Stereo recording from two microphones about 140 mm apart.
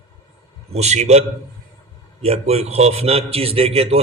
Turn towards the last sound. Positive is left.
turn(degrees=-45)  # may be behind; listen again after turning